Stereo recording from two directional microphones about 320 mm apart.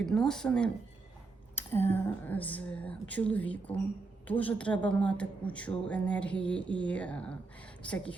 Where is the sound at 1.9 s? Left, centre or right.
Centre.